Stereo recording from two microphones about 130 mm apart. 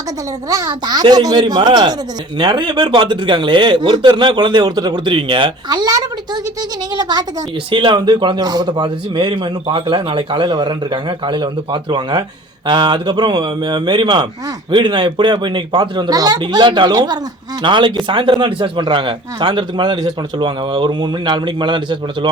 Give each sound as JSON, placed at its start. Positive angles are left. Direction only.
{"t": 0.4, "sound": "a man's voice", "side_deg": -25}